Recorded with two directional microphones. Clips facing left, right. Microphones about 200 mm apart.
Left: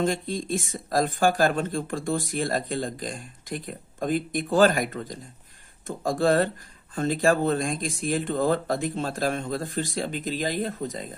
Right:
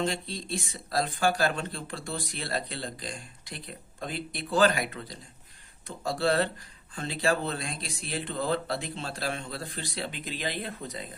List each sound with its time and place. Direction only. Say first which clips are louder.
0.0 s speech: left 5 dB; 50° left (ahead or behind)